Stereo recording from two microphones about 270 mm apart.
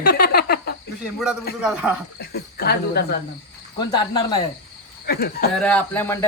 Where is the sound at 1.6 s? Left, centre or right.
Centre.